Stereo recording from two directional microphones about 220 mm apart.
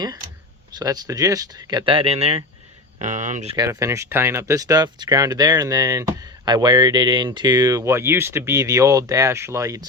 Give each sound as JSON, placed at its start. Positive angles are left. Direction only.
{"t": 0.8, "sound": "speech", "side_deg": -15}
{"t": 3.5, "sound": "speech", "side_deg": -15}